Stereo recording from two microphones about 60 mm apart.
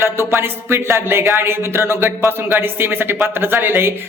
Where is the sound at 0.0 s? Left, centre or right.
Right.